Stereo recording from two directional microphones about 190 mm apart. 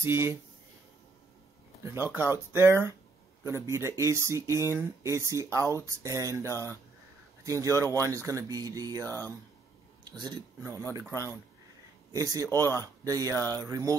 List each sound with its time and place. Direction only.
0.0 s speech: 15° right (ahead or behind)
1.8 s speech: 15° right (ahead or behind)
6.5 s speech: 15° left (ahead or behind)
7.4 s speech: 15° right (ahead or behind)
9.0 s speech: 10° left (ahead or behind)
10.0 s speech: 25° right (ahead or behind)
12.1 s speech: 15° right (ahead or behind)
12.4 s speech: 15° left (ahead or behind)
12.8 s speech: 15° right (ahead or behind)
13.4 s speech: 10° left (ahead or behind)
13.7 s speech: 15° right (ahead or behind)